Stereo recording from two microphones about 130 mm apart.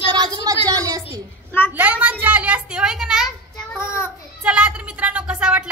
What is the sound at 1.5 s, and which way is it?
Speech, 15° left (ahead or behind).